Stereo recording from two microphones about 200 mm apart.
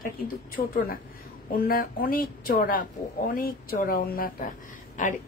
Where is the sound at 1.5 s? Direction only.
45° left (ahead or behind).